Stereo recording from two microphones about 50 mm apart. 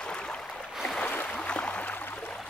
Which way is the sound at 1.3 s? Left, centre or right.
Left.